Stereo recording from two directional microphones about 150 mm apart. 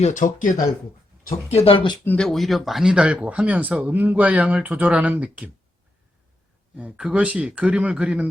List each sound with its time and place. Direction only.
0.0 s speech: 55° left (ahead or behind)
1.5 s speech: 40° left (ahead or behind)
2.0 s speech: 5° left (ahead or behind)
6.7 s speech: 5° right (ahead or behind)